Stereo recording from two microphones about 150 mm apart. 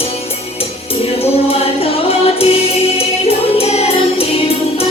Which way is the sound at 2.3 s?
40° left (ahead or behind).